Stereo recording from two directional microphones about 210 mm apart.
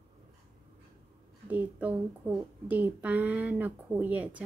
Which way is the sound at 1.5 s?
5° right (ahead or behind).